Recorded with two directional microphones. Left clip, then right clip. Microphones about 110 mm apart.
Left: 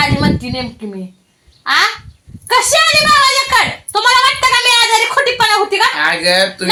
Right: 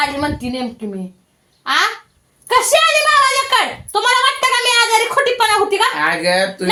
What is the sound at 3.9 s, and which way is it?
A woman's voice, 15° left (ahead or behind).